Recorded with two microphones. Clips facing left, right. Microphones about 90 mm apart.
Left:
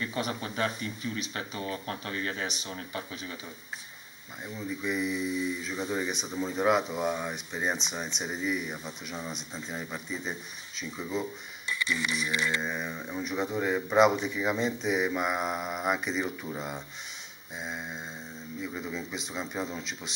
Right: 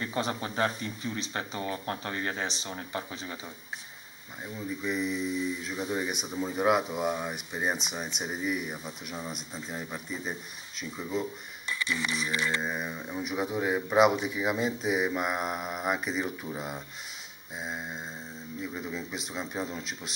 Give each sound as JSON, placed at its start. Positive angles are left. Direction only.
{"t": 0.0, "sound": "speech", "side_deg": -30}
{"t": 4.6, "sound": "speech", "side_deg": 0}
{"t": 12.4, "sound": "speech", "side_deg": -5}